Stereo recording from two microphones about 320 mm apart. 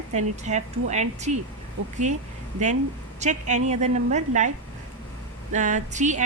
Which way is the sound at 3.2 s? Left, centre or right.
Right.